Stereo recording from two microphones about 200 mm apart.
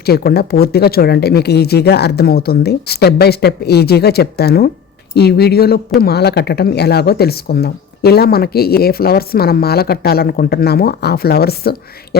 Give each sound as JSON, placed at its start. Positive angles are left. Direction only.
{"t": 0.0, "sound": "speech", "side_deg": 50}